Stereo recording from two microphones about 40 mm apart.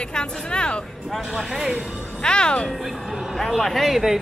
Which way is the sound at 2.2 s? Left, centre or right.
Left.